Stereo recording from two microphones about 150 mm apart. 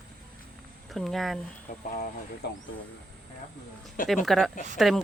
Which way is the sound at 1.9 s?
65° left (ahead or behind).